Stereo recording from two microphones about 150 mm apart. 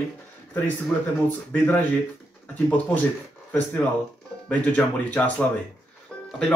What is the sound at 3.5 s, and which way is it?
Speech, 10° left (ahead or behind).